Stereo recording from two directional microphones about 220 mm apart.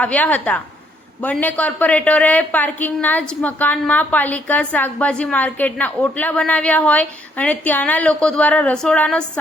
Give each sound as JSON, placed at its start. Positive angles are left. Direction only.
{"t": 0.0, "sound": "a woman's voice", "side_deg": 5}